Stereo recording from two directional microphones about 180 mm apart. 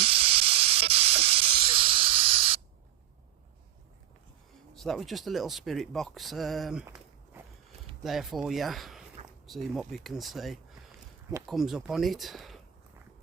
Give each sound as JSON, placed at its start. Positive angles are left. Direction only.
{"t": 0.0, "sound": "hiss", "side_deg": -30}
{"t": 4.7, "sound": "speech", "side_deg": 0}
{"t": 8.0, "sound": "speech", "side_deg": 0}